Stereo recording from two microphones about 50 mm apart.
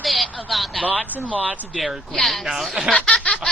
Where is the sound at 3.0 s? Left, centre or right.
Left.